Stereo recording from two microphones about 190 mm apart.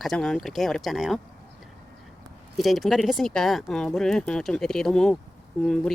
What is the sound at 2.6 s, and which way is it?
Speech, centre (ahead or behind).